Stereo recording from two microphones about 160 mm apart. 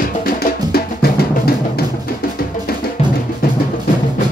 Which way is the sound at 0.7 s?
75° left (ahead or behind).